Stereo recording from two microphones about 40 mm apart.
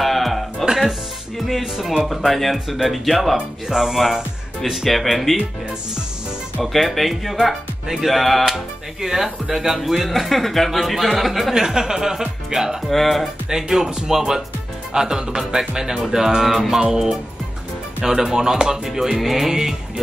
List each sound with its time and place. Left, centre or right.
0.0 s music: centre
1.5 s speech: centre
3.3 s music: centre
4.6 s speech: centre
6.6 s speech: centre
8.5 s speech: centre
11.6 s music: centre
12.8 s speech: centre
13.5 s music: centre